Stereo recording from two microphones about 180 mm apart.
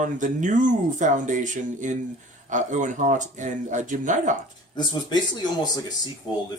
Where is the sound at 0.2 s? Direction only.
45° right (ahead or behind).